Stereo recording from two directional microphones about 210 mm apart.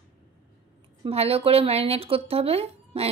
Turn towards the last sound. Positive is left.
turn(degrees=-30)  # may be behind; listen again after turning